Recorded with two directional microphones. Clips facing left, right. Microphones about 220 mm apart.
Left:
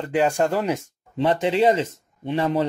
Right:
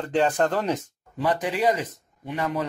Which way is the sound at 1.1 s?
25° left (ahead or behind).